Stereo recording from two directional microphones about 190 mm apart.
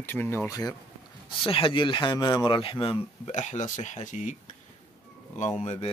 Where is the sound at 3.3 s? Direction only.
40° left (ahead or behind).